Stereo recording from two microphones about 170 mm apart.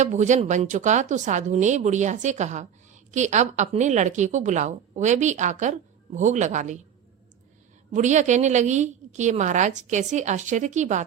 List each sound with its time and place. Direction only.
0.0 s a woman's voice: 45° right (ahead or behind)
7.9 s a woman's voice: 45° right (ahead or behind)